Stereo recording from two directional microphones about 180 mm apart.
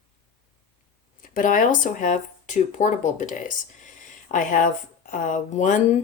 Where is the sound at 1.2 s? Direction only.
50° left (ahead or behind).